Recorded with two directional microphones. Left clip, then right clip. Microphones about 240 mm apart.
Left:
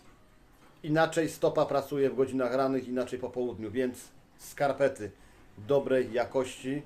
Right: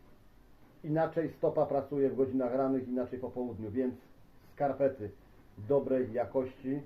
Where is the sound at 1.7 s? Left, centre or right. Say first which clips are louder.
Left 3 dB; centre.